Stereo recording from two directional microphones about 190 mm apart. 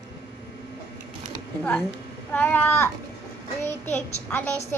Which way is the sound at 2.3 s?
10° left (ahead or behind).